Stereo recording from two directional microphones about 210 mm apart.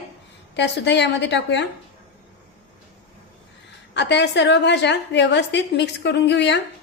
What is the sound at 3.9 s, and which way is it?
A woman's voice, 55° left (ahead or behind).